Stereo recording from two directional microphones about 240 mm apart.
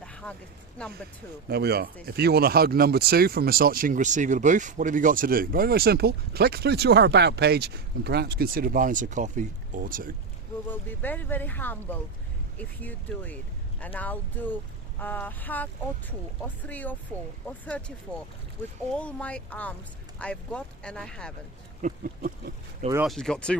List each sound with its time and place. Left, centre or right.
0.0 s a sound: centre
1.5 s speech: right
10.7 s speech: centre
18.9 s speech: centre
21.8 s speech: right
23.0 s speech: centre